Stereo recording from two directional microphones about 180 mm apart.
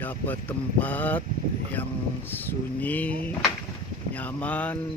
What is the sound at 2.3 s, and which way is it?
Speech, 10° left (ahead or behind).